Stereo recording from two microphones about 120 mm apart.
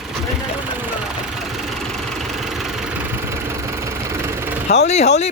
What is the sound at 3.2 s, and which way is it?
Engine, 25° right (ahead or behind).